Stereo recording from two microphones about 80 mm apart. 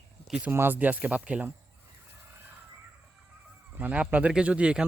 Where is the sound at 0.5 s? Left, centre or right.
Right.